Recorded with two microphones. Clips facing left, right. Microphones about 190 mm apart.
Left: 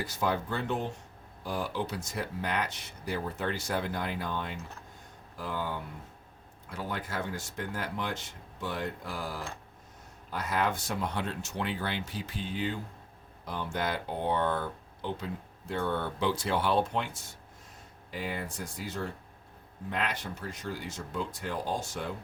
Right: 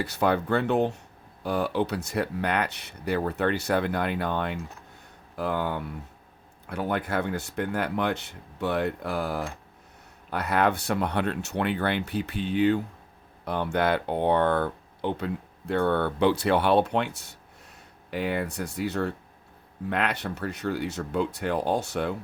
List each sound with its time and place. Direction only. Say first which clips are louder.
0.0 s speech: right 6 dB; 65° right (ahead or behind)